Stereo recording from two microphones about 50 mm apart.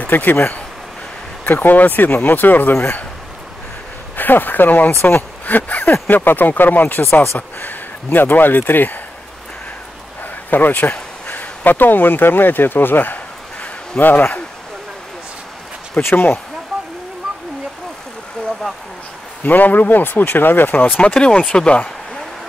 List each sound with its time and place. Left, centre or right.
0.1 s speech: left
2.7 s speech: left
4.2 s speech: left
5.0 s a sound: left
6.0 s speech: left
10.5 s speech: left
16.0 s speech: left
19.4 s speech: left
21.0 s speech: centre